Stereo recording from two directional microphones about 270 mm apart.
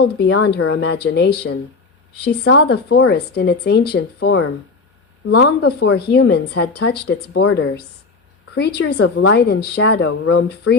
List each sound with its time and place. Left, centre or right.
0.0 s speech: left
9.0 s speech: left